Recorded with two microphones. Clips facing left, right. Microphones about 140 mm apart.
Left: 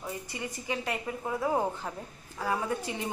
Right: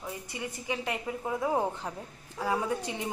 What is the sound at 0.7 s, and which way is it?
A woman's voice, 15° right (ahead or behind).